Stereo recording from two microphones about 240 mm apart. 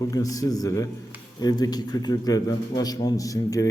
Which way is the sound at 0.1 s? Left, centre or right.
Centre.